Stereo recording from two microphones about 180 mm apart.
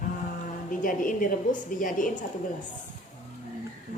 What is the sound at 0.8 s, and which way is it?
A woman's voice, 50° left (ahead or behind).